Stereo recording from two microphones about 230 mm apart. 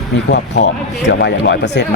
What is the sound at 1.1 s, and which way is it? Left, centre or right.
Speech, left.